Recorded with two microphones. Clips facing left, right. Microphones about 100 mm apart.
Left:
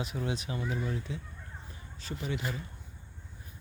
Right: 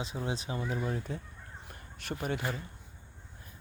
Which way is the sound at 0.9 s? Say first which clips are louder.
Right 1 dB; 45° right (ahead or behind).